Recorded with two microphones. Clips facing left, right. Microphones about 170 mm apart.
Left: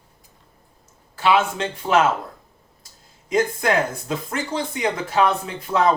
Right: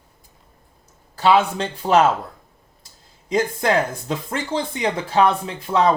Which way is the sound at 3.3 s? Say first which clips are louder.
Right 1 dB; 30° right (ahead or behind).